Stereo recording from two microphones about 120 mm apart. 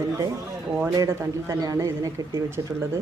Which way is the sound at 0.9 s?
25° right (ahead or behind).